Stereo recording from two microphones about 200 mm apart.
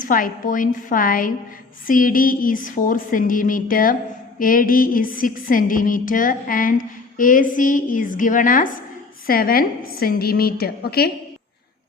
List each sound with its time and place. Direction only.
0.0 s music: 45° left (ahead or behind)